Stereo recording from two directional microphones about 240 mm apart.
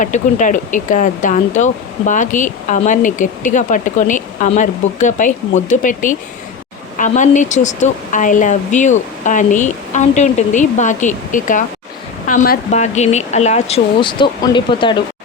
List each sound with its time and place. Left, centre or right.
0.0 s speech: left